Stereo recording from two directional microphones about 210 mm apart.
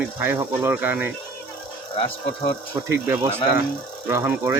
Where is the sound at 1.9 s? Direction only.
25° left (ahead or behind).